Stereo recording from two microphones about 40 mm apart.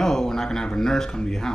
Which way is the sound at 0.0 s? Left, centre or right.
Centre.